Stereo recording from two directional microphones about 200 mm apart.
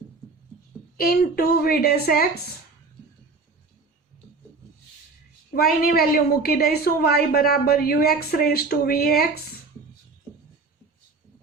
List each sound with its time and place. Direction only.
0.9 s a woman's voice: 50° left (ahead or behind)
5.5 s a woman's voice: 50° left (ahead or behind)